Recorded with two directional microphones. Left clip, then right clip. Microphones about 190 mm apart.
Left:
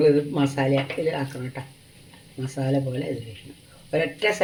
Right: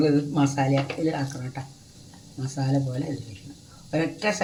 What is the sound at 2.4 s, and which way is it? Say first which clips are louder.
Speech: left 3 dB; 45° left (ahead or behind).